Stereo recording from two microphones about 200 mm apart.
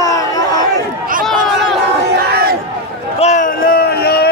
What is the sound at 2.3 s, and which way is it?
Crowd, 50° right (ahead or behind).